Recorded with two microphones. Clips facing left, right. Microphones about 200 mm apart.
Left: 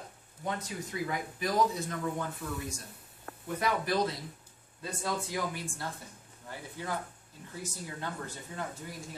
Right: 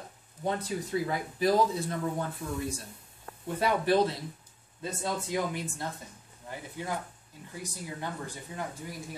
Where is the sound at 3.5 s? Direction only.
30° right (ahead or behind).